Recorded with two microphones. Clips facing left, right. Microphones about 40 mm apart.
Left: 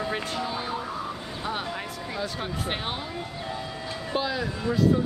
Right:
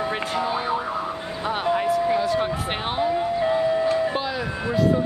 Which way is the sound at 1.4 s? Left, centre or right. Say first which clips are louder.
Right 9 dB; right.